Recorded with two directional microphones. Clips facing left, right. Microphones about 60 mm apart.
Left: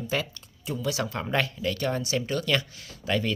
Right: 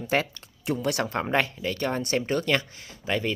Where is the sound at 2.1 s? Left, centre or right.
Right.